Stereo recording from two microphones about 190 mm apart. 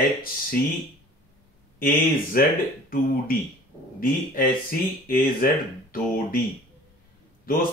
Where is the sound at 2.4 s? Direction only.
50° left (ahead or behind).